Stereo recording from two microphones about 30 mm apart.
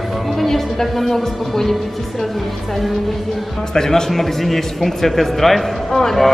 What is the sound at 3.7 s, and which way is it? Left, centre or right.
Speech, centre.